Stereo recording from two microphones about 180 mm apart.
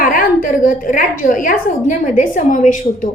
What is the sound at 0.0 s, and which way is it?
A woman's voice, 50° left (ahead or behind).